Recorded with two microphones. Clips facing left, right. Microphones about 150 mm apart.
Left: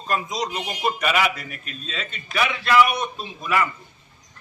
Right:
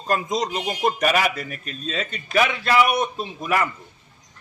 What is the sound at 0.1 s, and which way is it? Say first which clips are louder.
A man's voice: right 3 dB; 50° right (ahead or behind).